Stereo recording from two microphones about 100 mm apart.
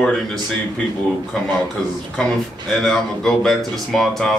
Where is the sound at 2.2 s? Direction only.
5° left (ahead or behind).